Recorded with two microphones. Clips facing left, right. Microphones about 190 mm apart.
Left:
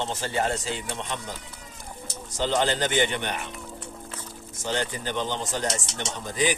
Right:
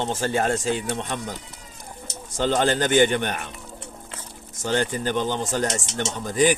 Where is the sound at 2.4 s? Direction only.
50° right (ahead or behind).